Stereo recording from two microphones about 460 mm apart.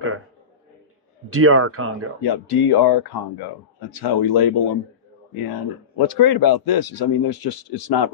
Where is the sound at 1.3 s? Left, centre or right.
Right.